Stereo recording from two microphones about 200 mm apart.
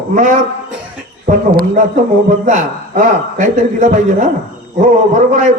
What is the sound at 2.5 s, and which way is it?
A man's voice, 40° right (ahead or behind).